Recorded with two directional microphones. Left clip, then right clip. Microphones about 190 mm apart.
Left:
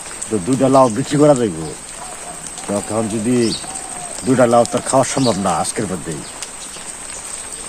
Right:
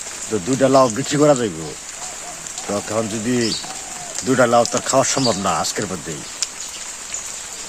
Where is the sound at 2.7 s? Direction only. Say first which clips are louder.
Left 2 dB; 25° right (ahead or behind).